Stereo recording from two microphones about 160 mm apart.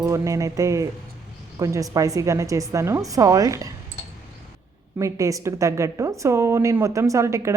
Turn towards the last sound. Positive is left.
turn(degrees=-20)  # may be behind; listen again after turning